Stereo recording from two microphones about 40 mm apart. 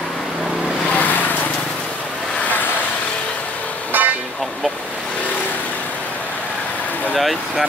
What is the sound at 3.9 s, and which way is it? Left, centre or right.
Vehicle, right.